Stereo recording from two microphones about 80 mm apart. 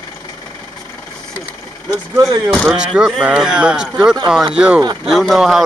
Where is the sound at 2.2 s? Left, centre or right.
Right.